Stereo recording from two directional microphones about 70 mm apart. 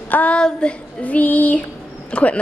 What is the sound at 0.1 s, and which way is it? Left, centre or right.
Child singing, centre.